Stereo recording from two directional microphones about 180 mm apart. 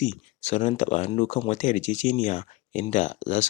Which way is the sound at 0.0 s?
40° left (ahead or behind).